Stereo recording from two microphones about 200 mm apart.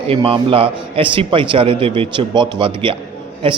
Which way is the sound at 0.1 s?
25° right (ahead or behind).